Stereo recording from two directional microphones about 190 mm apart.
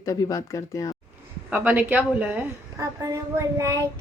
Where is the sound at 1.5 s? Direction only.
10° right (ahead or behind).